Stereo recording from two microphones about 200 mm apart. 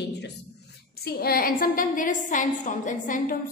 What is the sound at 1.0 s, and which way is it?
A woman's voice, 50° left (ahead or behind).